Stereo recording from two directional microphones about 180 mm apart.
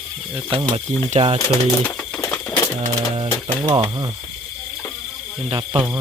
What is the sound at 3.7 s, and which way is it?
Speech, 25° right (ahead or behind).